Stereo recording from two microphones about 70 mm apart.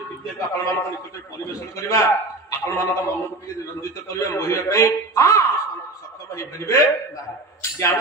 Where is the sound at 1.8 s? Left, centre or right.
Left.